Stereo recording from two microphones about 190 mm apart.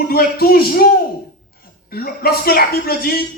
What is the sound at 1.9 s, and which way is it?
Speech, 55° left (ahead or behind).